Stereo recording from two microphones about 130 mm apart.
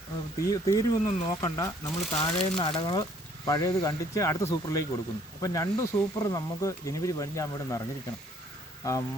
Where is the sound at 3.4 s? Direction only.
30° left (ahead or behind).